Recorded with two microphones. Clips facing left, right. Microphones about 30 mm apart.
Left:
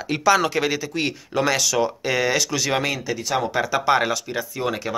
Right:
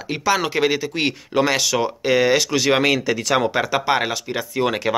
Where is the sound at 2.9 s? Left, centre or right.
Right.